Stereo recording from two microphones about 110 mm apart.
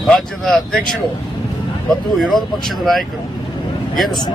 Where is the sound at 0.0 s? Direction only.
Centre (ahead or behind).